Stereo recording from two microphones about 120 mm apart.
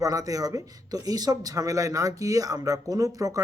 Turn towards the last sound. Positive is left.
turn(degrees=-30)  # may be behind; listen again after turning